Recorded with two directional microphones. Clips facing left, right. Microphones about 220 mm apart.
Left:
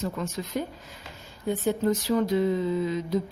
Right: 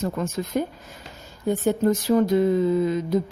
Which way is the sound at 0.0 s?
50° right (ahead or behind).